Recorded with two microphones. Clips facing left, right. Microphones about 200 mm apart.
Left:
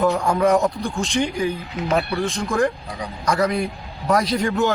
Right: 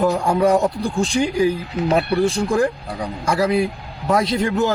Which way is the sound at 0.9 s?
35° right (ahead or behind).